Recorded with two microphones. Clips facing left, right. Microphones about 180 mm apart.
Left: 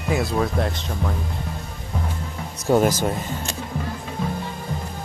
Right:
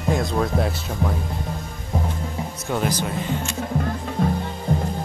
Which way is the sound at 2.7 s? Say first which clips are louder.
Left 6 dB; 45° left (ahead or behind).